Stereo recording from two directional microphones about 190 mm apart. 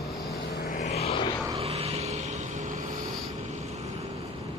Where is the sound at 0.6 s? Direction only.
40° left (ahead or behind).